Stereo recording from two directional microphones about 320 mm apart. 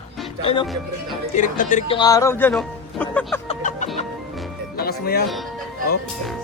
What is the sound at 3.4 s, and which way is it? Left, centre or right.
Music, left.